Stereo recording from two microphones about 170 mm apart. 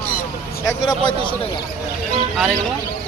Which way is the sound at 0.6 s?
15° left (ahead or behind).